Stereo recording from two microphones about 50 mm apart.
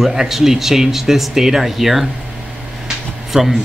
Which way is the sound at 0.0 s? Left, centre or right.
Centre.